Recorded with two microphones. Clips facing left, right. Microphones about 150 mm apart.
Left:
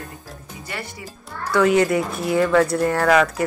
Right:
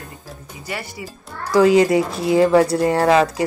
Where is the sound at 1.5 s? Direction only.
30° right (ahead or behind).